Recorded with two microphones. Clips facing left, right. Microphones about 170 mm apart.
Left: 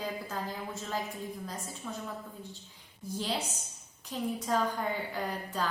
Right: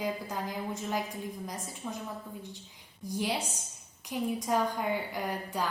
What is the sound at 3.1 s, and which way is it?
A woman's voice, 15° right (ahead or behind).